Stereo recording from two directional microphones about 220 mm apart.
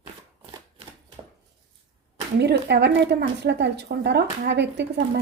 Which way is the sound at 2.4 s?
50° right (ahead or behind).